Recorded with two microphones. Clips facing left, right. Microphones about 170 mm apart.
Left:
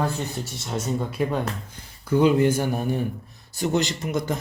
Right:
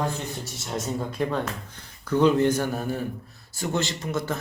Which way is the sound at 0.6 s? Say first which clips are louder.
Left 2 dB; centre (ahead or behind).